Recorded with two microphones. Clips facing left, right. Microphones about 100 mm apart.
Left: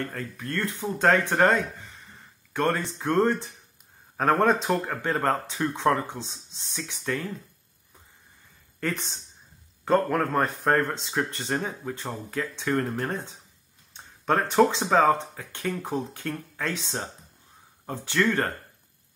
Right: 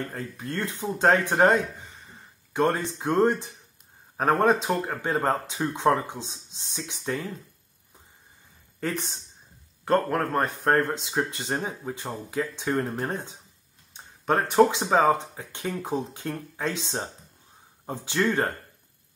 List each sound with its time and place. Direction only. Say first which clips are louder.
0.1 s speech: left 1 dB; 20° right (ahead or behind)
8.9 s speech: right 2 dB; 5° right (ahead or behind)
13.9 s speech: even; 5° right (ahead or behind)